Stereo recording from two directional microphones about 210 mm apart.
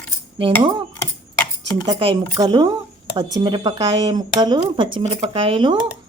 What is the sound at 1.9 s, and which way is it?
Speech, 20° right (ahead or behind).